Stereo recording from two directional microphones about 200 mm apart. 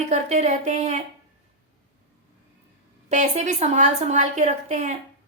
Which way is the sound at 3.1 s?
35° right (ahead or behind).